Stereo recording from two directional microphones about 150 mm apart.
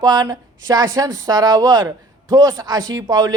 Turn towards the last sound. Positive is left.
turn(degrees=-25)  # may be behind; listen again after turning